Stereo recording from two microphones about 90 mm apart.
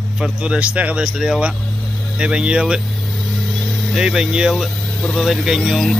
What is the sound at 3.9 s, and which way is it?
Speech, 5° right (ahead or behind).